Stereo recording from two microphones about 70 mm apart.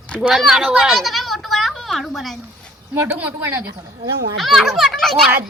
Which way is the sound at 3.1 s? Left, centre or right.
Right.